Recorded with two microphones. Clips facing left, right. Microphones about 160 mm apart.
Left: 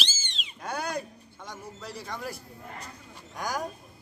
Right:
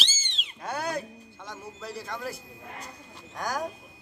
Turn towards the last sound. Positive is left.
turn(degrees=0)  # may be behind; listen again after turning